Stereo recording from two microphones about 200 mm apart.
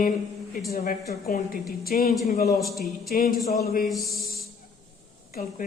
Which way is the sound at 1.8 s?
50° left (ahead or behind).